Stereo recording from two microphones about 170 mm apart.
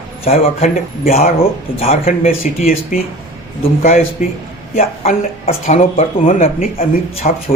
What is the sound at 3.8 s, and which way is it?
Speech, 40° left (ahead or behind).